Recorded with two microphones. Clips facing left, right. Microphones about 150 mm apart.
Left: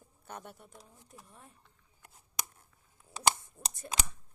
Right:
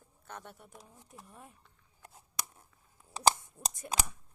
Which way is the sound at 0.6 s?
10° right (ahead or behind).